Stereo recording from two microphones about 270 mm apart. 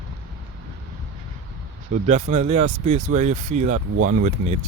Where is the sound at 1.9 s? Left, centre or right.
Right.